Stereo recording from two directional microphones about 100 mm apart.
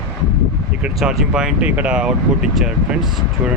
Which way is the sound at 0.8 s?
5° right (ahead or behind).